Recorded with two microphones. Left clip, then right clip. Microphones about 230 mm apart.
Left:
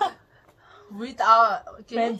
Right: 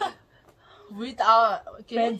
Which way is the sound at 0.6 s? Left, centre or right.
Centre.